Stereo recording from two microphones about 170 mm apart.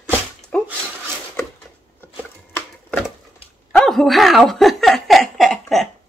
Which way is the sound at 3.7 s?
5° left (ahead or behind).